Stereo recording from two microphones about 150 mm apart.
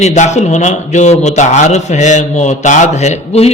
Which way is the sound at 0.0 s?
50° left (ahead or behind).